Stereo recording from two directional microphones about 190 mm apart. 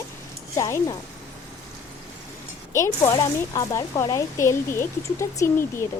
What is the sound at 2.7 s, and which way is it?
Speech, 15° left (ahead or behind).